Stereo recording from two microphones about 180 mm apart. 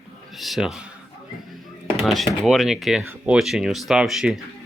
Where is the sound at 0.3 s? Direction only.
Centre (ahead or behind).